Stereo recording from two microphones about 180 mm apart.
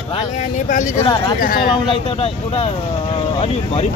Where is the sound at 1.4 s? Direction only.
55° left (ahead or behind).